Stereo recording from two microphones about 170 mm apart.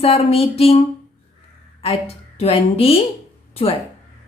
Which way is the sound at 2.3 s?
35° left (ahead or behind).